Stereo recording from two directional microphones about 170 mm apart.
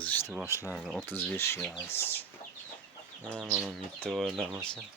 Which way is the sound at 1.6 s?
5° left (ahead or behind).